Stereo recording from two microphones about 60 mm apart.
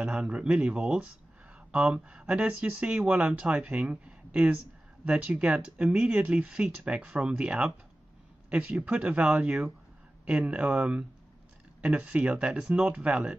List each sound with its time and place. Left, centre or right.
0.0 s speech: centre